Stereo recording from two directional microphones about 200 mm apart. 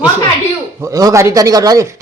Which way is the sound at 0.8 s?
15° right (ahead or behind).